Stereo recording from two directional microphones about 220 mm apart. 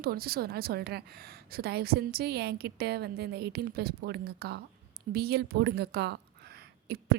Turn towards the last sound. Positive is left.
turn(degrees=-45)  # may be behind; listen again after turning